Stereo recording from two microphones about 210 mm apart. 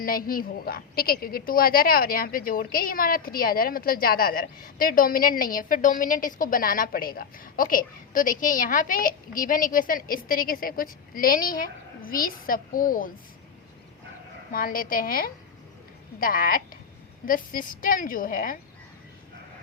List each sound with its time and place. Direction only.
0.0 s a woman's voice: 45° left (ahead or behind)
14.5 s a woman's voice: 45° left (ahead or behind)